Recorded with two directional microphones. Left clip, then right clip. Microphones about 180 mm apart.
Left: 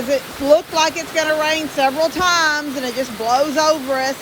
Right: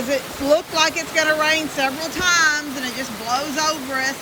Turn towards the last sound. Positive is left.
turn(degrees=30)  # may be behind; listen again after turning